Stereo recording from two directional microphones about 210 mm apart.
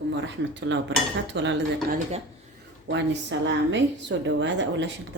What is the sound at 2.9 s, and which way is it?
A woman's voice, 60° right (ahead or behind).